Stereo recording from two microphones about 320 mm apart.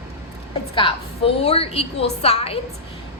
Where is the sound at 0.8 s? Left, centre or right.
Centre.